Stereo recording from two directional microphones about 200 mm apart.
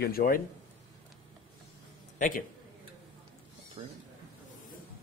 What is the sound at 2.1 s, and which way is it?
Speech, 40° left (ahead or behind).